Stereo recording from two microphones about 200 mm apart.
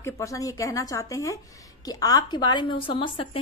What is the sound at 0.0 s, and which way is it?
A woman's voice, 15° left (ahead or behind).